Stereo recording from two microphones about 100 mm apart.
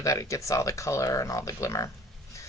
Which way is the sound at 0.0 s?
30° left (ahead or behind).